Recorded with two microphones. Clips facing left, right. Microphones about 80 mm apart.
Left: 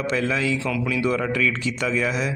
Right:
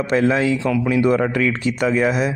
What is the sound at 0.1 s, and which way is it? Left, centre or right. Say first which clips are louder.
Speech: right 8 dB; right.